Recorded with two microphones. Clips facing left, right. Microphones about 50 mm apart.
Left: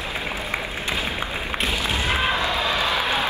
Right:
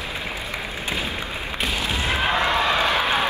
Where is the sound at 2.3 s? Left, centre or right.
Right.